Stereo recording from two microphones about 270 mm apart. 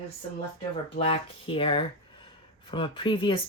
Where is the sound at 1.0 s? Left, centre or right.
Left.